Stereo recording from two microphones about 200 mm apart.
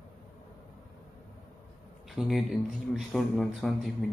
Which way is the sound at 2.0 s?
Centre (ahead or behind).